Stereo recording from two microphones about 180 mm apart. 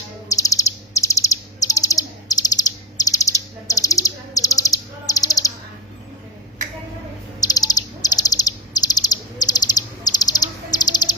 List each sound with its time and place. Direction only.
0.3 s bird: 20° left (ahead or behind)
7.4 s bird: 20° left (ahead or behind)